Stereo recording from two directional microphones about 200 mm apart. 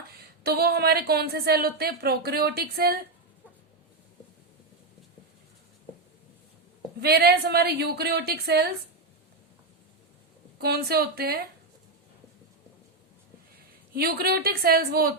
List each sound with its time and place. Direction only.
0.4 s a woman's voice: 50° right (ahead or behind)
7.0 s a woman's voice: 55° right (ahead or behind)
10.6 s a woman's voice: 50° right (ahead or behind)
13.9 s a woman's voice: 50° right (ahead or behind)